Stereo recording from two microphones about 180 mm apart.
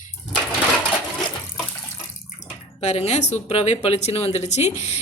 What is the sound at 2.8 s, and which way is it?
A woman's voice, 35° left (ahead or behind).